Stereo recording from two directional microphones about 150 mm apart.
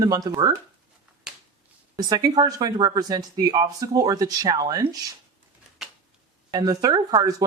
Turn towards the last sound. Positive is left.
turn(degrees=-25)  # may be behind; listen again after turning